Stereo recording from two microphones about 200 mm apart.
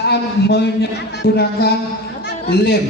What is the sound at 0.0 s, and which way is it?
A man's voice, 55° left (ahead or behind).